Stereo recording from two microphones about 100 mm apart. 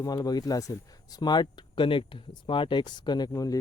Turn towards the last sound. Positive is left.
turn(degrees=35)  # may be behind; listen again after turning